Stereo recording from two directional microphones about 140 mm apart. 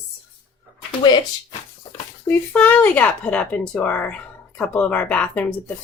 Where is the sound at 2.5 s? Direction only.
10° left (ahead or behind).